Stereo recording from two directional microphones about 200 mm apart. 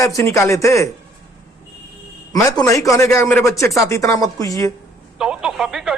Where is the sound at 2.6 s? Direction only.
15° left (ahead or behind).